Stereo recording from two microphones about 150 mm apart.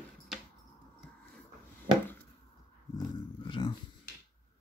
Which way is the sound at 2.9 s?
35° left (ahead or behind).